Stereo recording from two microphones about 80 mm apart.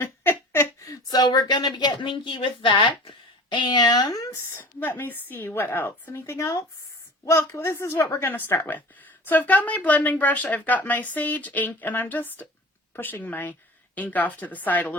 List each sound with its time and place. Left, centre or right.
0.0 s a sound: left
0.9 s a woman's voice: left
4.5 s speech: left